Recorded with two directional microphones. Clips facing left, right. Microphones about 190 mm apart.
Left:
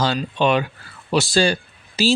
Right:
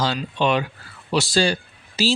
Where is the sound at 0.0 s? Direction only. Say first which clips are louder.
Left 2 dB; 50° left (ahead or behind).